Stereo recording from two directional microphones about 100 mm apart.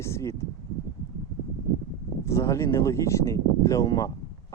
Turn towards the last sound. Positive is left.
turn(degrees=35)  # may be behind; listen again after turning